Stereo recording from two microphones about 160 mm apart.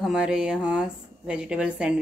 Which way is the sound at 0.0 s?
5° right (ahead or behind).